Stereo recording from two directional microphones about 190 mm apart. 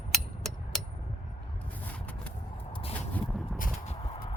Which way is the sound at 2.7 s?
30° left (ahead or behind).